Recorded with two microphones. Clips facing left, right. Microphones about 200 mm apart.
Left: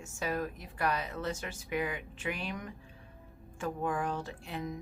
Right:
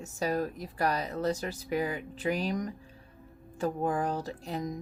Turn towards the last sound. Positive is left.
turn(degrees=-40)  # may be behind; listen again after turning